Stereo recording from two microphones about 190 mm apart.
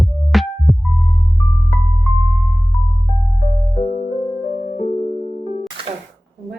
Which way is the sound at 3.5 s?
25° left (ahead or behind).